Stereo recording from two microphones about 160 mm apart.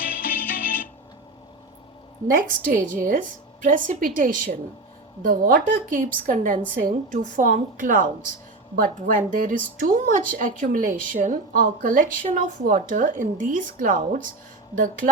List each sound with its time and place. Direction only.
0.3 s music: 60° left (ahead or behind)
2.3 s a woman's voice: 55° right (ahead or behind)